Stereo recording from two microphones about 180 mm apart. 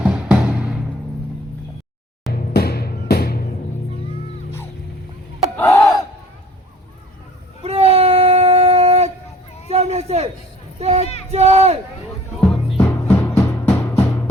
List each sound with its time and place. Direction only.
0.0 s music: 5° right (ahead or behind)
2.3 s music: 60° left (ahead or behind)
5.5 s battle cry: 10° left (ahead or behind)
7.6 s a sound: 30° right (ahead or behind)
12.8 s music: 15° left (ahead or behind)